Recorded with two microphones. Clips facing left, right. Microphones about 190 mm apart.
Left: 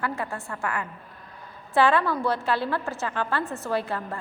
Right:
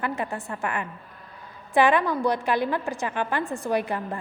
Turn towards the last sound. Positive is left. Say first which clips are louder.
# right 2 dB
turn(degrees=-15)  # may be behind; listen again after turning